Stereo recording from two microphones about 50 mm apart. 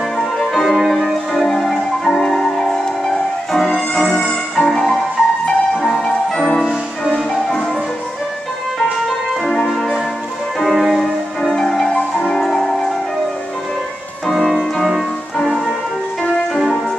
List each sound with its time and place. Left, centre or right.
0.2 s music: centre
4.2 s music: centre
4.6 s music: centre
9.0 s music: centre
11.4 s music: centre
14.3 s music: centre